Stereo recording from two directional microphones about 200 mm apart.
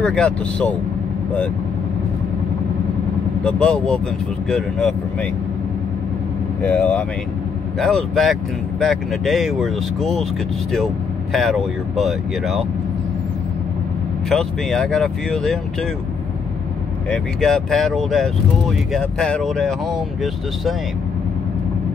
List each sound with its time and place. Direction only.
0.0 s speech: 5° left (ahead or behind)
3.4 s speech: 5° left (ahead or behind)
6.6 s speech: 10° left (ahead or behind)
11.3 s speech: centre (ahead or behind)
14.3 s speech: 5° left (ahead or behind)
17.1 s speech: centre (ahead or behind)